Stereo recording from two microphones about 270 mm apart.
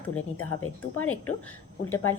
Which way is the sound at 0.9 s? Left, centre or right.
Left.